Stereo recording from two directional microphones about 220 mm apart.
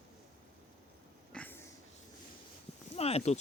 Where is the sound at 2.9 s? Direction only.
30° left (ahead or behind).